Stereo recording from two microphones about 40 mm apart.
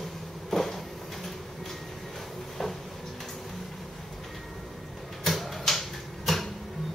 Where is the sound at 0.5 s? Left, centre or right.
Centre.